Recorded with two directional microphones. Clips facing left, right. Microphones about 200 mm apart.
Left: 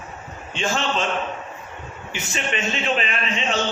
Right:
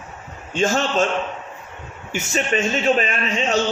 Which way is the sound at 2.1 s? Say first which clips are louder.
Right 6 dB; 40° right (ahead or behind).